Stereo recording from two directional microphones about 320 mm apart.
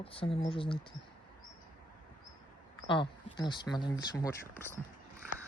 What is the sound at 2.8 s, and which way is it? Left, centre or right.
Speech, centre.